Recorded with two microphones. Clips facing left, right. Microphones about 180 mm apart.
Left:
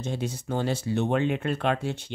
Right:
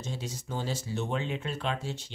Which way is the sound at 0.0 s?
60° left (ahead or behind).